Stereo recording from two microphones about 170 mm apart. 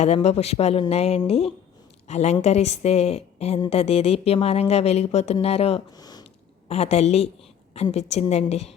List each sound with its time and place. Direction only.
0.0 s speech: 40° left (ahead or behind)
6.0 s a sound: 25° left (ahead or behind)
6.7 s speech: 40° left (ahead or behind)